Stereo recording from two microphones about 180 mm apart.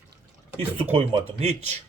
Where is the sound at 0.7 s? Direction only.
30° right (ahead or behind).